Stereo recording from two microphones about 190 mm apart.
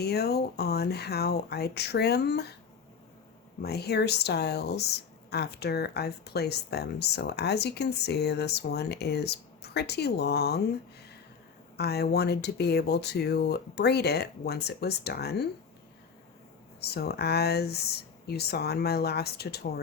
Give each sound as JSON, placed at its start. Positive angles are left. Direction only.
{"t": 0.0, "sound": "speech", "side_deg": 60}
{"t": 3.6, "sound": "speech", "side_deg": 55}
{"t": 11.8, "sound": "speech", "side_deg": 60}
{"t": 16.9, "sound": "speech", "side_deg": 55}